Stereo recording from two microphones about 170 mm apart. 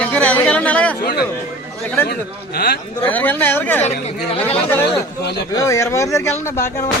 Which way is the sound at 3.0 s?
10° left (ahead or behind).